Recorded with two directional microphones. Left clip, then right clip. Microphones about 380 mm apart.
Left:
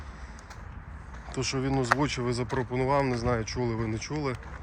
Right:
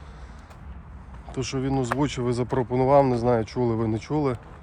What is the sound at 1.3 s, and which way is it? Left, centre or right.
Speech, centre.